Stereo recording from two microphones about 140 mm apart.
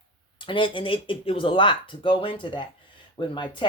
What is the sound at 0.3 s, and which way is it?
Speech, 35° left (ahead or behind).